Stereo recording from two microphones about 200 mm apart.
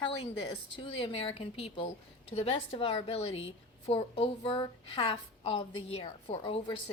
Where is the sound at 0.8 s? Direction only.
25° left (ahead or behind).